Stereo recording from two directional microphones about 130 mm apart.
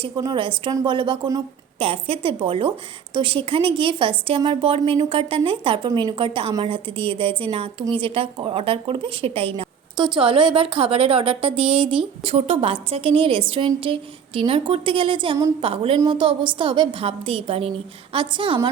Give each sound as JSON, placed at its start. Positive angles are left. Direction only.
{"t": 0.0, "sound": "a woman's voice", "side_deg": -35}